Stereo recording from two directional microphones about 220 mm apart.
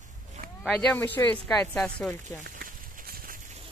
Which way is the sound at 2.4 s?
40° right (ahead or behind).